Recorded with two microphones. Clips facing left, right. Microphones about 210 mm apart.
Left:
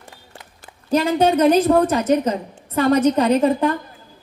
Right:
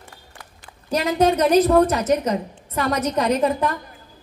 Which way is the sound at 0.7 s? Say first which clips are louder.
Left 4 dB; 30° left (ahead or behind).